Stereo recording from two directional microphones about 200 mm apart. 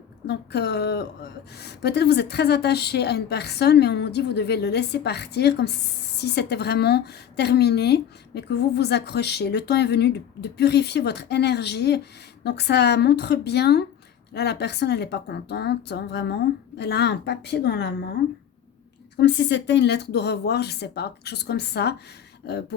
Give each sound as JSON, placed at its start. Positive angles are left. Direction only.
{"t": 0.3, "sound": "a woman's voice", "side_deg": 55}
{"t": 19.2, "sound": "a woman's voice", "side_deg": 60}